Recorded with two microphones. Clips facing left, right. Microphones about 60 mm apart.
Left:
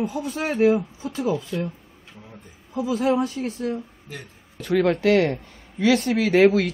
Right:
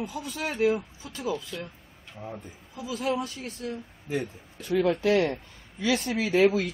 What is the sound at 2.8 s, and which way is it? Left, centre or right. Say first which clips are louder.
Speech: left 10 dB; left.